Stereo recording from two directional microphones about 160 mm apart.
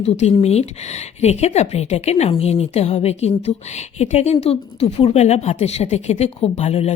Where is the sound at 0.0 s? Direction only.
40° left (ahead or behind).